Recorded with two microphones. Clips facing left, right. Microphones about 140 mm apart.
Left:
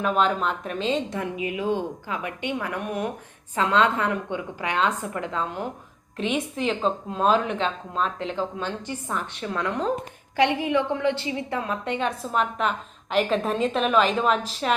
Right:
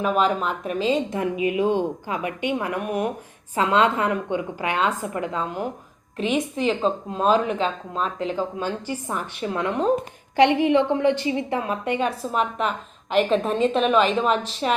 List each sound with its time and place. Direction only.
0.0 s a woman's voice: 5° right (ahead or behind)
1.2 s a woman's voice: 20° right (ahead or behind); by 14.8 s centre (ahead or behind)